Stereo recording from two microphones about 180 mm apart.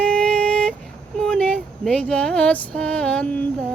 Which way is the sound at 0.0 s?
5° left (ahead or behind).